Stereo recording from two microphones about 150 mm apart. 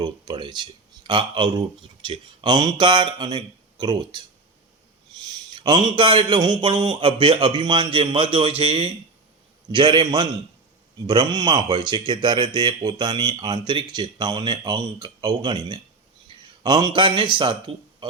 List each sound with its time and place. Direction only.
0.0 s speech: 30° right (ahead or behind)
5.5 s a man's voice: 30° right (ahead or behind)
16.3 s a sound: 30° right (ahead or behind)
16.6 s a man's voice: 30° right (ahead or behind)